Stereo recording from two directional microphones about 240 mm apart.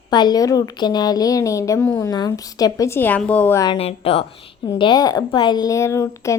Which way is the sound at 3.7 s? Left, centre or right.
Left.